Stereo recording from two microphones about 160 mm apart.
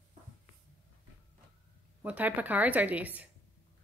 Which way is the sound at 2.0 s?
10° right (ahead or behind).